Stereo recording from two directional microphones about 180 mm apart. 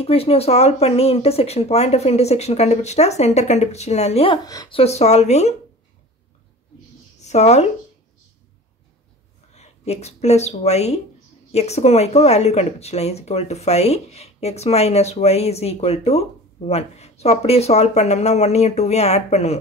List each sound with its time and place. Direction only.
0.0 s speech: 35° left (ahead or behind)
4.5 s speech: 20° left (ahead or behind)
4.7 s speech: 35° left (ahead or behind)
7.2 s speech: 40° left (ahead or behind)
9.5 s speech: 35° left (ahead or behind)